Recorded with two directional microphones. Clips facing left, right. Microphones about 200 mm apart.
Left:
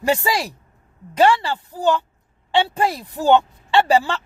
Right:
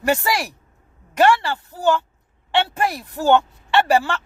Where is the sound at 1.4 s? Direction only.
20° left (ahead or behind).